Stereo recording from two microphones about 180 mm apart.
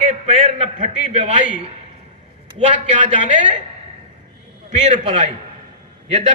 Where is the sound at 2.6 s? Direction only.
40° right (ahead or behind).